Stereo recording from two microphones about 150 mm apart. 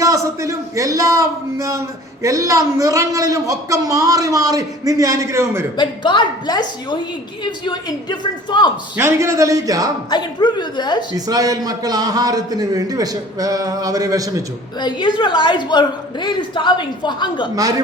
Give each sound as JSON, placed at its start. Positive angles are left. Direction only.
{"t": 0.0, "sound": "a man's voice", "side_deg": -20}
{"t": 5.7, "sound": "a woman's voice", "side_deg": 30}
{"t": 9.0, "sound": "a man's voice", "side_deg": -20}
{"t": 10.1, "sound": "speech", "side_deg": 30}
{"t": 11.1, "sound": "a man's voice", "side_deg": -25}
{"t": 14.8, "sound": "a woman's voice", "side_deg": 30}
{"t": 17.5, "sound": "a man's voice", "side_deg": -25}